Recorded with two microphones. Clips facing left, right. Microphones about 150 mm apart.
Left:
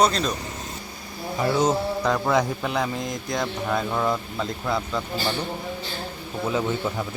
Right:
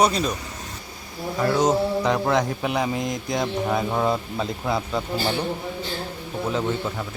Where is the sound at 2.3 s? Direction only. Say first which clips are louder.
Even; centre (ahead or behind).